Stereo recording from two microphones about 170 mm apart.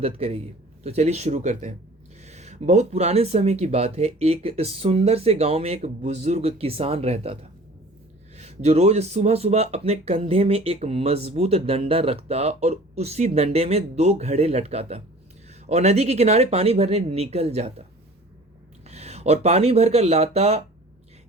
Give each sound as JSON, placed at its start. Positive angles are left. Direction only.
{"t": 0.0, "sound": "speech", "side_deg": -35}
{"t": 8.4, "sound": "speech", "side_deg": -40}
{"t": 18.9, "sound": "speech", "side_deg": -40}